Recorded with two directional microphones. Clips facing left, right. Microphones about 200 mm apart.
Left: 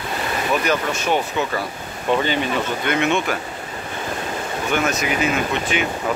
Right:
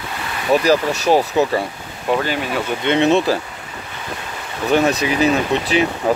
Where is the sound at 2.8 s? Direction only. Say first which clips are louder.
Right 8 dB; 25° right (ahead or behind).